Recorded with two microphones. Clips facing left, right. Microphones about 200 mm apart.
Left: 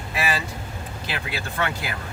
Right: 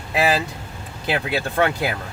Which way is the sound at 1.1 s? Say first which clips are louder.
Right 9 dB; 55° right (ahead or behind).